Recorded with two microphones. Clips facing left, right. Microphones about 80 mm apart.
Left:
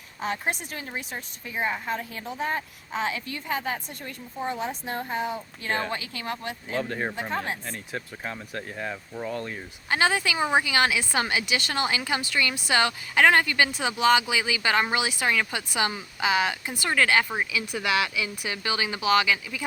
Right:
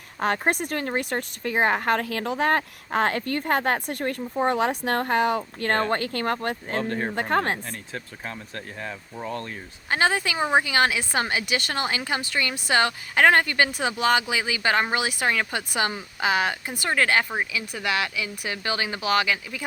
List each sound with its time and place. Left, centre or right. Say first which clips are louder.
0.2 s speech: right 6 dB; right
6.8 s speech: right 3 dB; centre
7.2 s speech: right 6 dB; right
7.7 s speech: left 1 dB; centre
9.9 s a woman's voice: right 1 dB; right